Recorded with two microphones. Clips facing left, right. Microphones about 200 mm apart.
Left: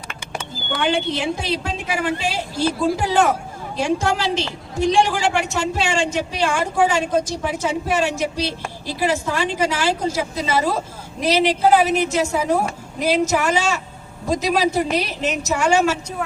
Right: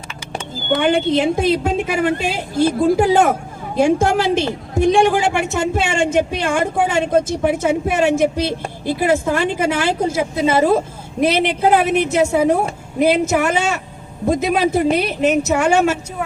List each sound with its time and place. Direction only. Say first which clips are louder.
0.7 s a woman's voice: right 6 dB; 55° right (ahead or behind)